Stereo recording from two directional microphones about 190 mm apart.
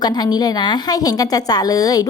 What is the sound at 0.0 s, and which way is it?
A woman's voice, 20° left (ahead or behind).